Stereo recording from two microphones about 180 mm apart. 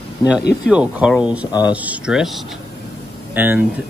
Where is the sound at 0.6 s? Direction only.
5° right (ahead or behind).